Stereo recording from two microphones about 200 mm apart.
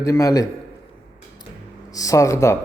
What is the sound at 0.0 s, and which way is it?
Speech, 15° left (ahead or behind).